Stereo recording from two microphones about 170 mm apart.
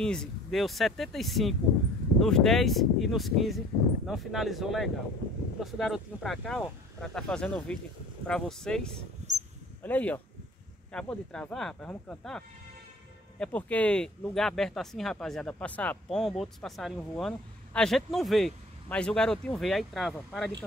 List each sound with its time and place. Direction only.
0.0 s speech: 5° left (ahead or behind)
9.2 s cricket: 40° right (ahead or behind)
9.8 s speech: 10° left (ahead or behind)